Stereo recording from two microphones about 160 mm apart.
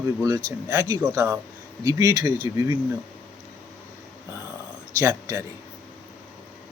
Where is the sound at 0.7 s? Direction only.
20° right (ahead or behind).